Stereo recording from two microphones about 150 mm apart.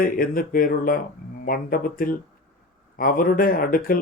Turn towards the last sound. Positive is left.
turn(degrees=70)  # may be behind; listen again after turning